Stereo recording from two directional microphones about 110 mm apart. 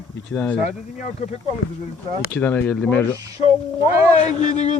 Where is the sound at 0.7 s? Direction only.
90° left.